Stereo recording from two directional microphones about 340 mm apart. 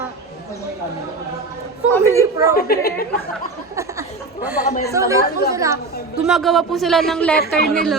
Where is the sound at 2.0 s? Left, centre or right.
Centre.